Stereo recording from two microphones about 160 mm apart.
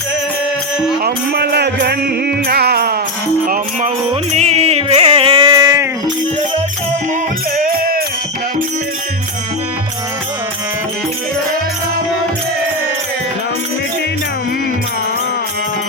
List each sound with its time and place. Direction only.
1.0 s music: 90° right
2.5 s music: 80° right
3.5 s music: 50° right (ahead or behind); by 5.9 s 20° right (ahead or behind)
7.6 s music: 65° right (ahead or behind)